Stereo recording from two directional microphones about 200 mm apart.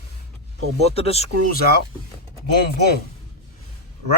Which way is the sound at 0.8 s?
30° left (ahead or behind).